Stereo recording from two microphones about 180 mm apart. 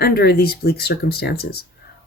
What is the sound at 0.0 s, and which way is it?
Speech, 60° left (ahead or behind).